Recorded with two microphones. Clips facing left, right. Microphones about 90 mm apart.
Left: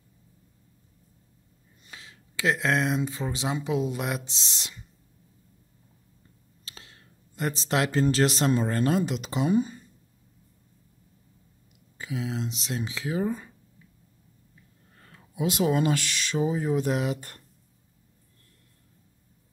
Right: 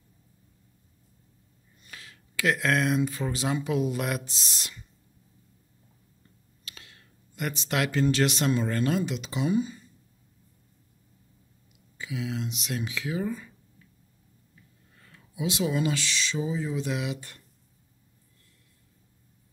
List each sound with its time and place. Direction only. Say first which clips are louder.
1.9 s speech: even; 20° left (ahead or behind)
6.6 s speech: left 1 dB; 30° left (ahead or behind)
12.0 s speech: left 1 dB; 35° left (ahead or behind)
15.3 s speech: left 3 dB; 45° left (ahead or behind)